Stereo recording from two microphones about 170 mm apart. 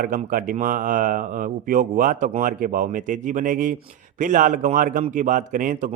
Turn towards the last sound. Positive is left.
turn(degrees=-50)  # may be behind; listen again after turning